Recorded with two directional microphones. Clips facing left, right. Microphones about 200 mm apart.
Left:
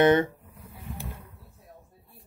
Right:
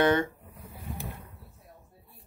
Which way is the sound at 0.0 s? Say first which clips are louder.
Left 4 dB; 20° left (ahead or behind).